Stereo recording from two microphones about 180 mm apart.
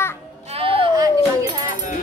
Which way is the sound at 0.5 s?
30° right (ahead or behind).